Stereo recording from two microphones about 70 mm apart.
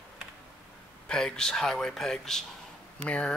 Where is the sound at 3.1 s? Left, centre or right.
Centre.